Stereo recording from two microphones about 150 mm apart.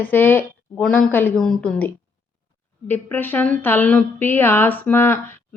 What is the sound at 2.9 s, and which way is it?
Speech, 15° left (ahead or behind).